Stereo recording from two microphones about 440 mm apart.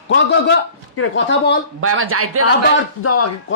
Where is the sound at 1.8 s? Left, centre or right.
Right.